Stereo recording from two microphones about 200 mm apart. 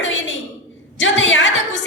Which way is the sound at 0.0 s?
70° left (ahead or behind).